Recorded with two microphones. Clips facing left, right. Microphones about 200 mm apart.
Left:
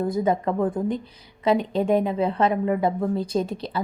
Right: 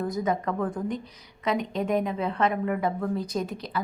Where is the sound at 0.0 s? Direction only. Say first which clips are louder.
Left 5 dB; 30° left (ahead or behind).